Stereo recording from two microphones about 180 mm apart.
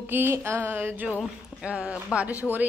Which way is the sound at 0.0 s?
10° right (ahead or behind).